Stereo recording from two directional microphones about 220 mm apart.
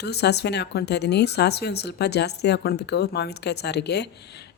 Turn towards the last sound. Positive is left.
turn(degrees=50)  # may be behind; listen again after turning